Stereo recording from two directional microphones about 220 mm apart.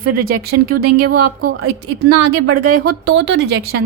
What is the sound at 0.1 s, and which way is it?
A woman's voice, 45° right (ahead or behind).